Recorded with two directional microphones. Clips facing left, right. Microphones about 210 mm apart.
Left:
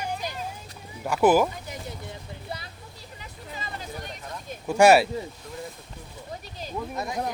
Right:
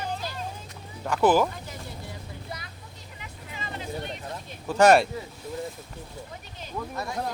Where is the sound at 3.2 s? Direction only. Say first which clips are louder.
Left 1 dB; 40° left (ahead or behind).